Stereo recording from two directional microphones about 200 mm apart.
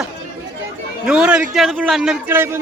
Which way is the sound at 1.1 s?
5° right (ahead or behind).